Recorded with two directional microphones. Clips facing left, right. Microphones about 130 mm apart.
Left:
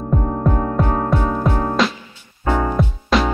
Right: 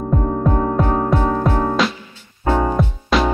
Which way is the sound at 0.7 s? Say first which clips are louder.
Right 2 dB; centre (ahead or behind).